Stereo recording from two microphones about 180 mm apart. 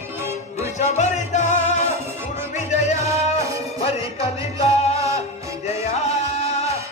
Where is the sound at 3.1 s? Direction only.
15° right (ahead or behind).